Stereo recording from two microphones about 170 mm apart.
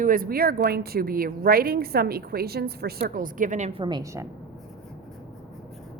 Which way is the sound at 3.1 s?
55° right (ahead or behind).